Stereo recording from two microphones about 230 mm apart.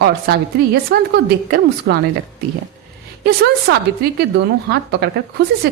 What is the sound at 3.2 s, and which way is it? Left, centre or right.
A woman's voice, right.